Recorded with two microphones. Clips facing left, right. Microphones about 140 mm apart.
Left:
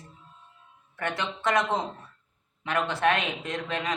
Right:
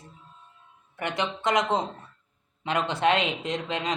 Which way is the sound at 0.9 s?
15° right (ahead or behind).